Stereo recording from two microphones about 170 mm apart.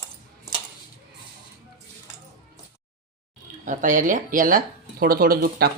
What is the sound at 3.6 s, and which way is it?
Speech, 50° right (ahead or behind).